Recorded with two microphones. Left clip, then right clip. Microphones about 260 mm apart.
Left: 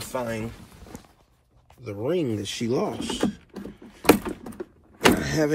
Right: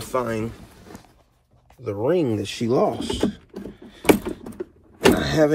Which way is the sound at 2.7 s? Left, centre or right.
Centre.